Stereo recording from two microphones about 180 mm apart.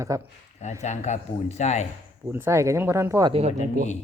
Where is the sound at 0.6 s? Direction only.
40° left (ahead or behind).